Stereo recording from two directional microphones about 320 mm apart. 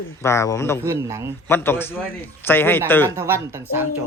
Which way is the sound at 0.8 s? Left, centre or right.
Centre.